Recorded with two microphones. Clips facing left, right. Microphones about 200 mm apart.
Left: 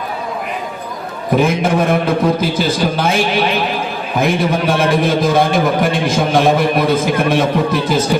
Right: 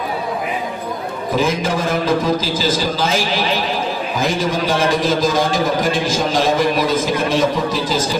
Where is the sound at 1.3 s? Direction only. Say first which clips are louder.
Left 5 dB; 60° left (ahead or behind).